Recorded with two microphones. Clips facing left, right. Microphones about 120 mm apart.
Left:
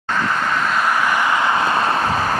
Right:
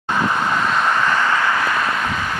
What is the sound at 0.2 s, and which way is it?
Vehicle, 15° right (ahead or behind).